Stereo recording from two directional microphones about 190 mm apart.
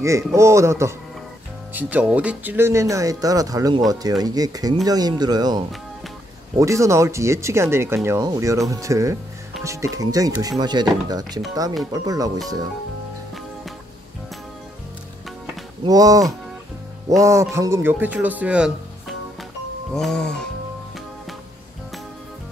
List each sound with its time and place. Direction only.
0.0 s speech: 15° right (ahead or behind)
15.8 s speech: 20° right (ahead or behind)
19.9 s music: 5° left (ahead or behind)